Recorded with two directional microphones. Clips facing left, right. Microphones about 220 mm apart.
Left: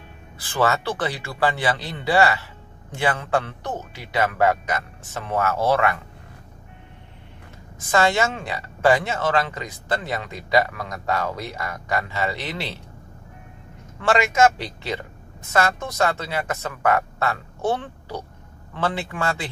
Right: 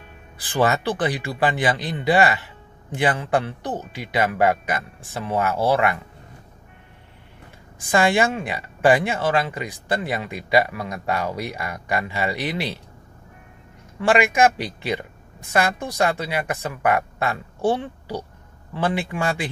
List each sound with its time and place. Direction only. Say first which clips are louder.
0.4 s a man's voice: right 1 dB; 15° right (ahead or behind)
7.8 s a man's voice: right 1 dB; 15° right (ahead or behind)
14.0 s a man's voice: right 1 dB; 15° right (ahead or behind)